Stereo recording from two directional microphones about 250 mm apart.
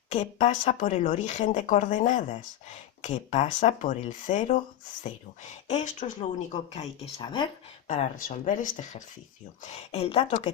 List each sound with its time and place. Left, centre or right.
0.1 s speech: left
5.6 s speech: left
7.2 s speech: centre
7.9 s speech: left